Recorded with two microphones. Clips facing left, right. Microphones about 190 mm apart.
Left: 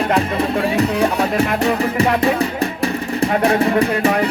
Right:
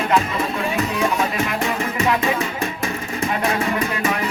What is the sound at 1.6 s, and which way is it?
Music, 35° left (ahead or behind).